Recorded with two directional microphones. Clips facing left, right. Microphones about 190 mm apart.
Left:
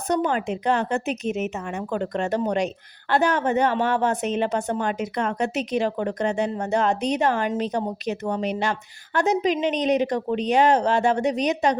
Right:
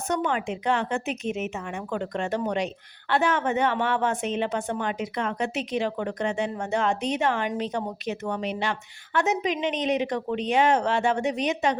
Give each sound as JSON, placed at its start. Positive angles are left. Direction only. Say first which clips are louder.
{"t": 0.1, "sound": "speech", "louder": "left 4 dB", "side_deg": 35}